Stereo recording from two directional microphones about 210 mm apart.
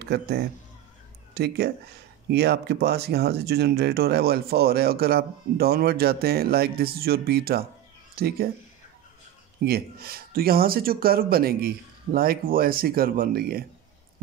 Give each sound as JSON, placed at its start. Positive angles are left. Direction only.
{"t": 0.0, "sound": "a man's voice", "side_deg": -50}
{"t": 9.7, "sound": "speech", "side_deg": -45}